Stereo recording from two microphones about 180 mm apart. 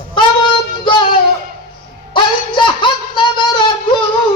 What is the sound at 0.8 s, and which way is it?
Music, 25° left (ahead or behind).